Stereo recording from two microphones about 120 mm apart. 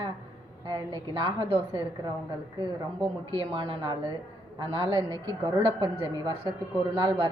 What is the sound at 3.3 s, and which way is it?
A woman's voice, 45° right (ahead or behind).